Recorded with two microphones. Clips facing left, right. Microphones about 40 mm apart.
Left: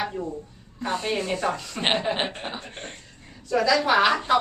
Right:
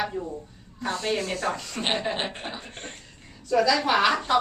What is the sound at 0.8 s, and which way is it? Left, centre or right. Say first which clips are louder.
A woman's voice: left 1 dB; left.